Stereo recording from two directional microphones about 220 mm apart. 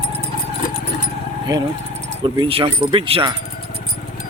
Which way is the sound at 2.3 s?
25° right (ahead or behind).